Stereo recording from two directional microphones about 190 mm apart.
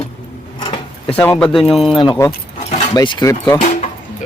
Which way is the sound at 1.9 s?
25° left (ahead or behind).